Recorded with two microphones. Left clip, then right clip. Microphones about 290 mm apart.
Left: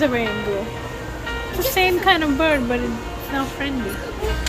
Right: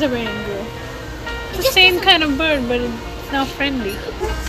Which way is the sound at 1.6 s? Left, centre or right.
Centre.